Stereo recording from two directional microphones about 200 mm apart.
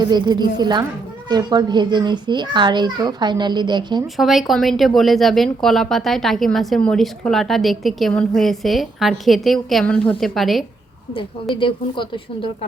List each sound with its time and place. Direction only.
0.0 s a child's voice: 20° right (ahead or behind)
4.0 s speech: centre (ahead or behind)
11.6 s speech: 25° left (ahead or behind)